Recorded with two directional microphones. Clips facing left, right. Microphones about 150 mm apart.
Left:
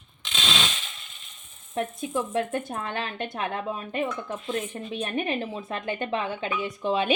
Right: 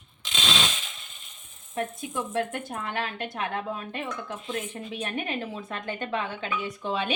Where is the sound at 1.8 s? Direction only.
20° left (ahead or behind).